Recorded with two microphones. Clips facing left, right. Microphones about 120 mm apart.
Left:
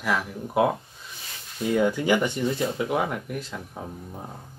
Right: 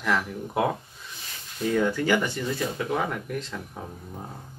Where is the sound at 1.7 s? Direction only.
15° left (ahead or behind).